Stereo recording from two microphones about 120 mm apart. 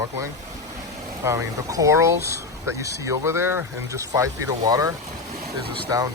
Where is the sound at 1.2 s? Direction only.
30° right (ahead or behind).